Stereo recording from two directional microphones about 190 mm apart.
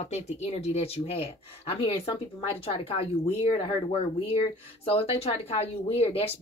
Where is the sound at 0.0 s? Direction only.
35° left (ahead or behind).